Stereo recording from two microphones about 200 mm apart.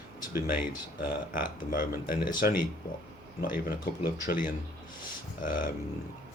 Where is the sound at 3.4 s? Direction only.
50° left (ahead or behind).